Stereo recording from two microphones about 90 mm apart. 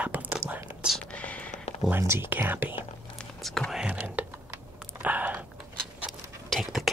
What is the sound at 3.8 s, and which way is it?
Whispering, 15° right (ahead or behind).